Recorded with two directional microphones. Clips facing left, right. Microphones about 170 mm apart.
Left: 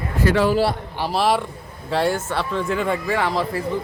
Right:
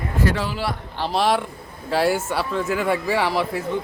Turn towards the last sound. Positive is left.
turn(degrees=0)  # may be behind; listen again after turning